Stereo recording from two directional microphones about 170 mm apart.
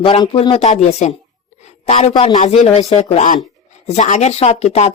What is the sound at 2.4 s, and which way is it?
Speech, 35° left (ahead or behind).